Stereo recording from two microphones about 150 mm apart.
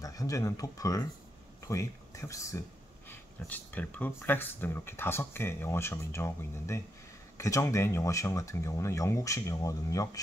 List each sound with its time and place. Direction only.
0.0 s speech: 25° left (ahead or behind)